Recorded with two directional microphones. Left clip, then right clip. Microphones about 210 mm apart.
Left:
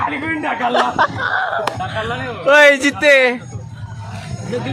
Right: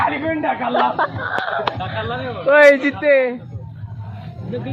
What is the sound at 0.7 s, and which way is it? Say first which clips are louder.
A man's voice: left 3 dB; 25° left (ahead or behind).